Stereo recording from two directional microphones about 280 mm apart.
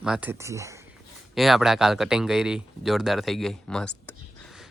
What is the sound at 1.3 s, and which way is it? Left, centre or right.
Speech, centre.